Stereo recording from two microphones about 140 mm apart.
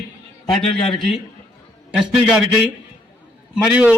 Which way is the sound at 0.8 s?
40° left (ahead or behind).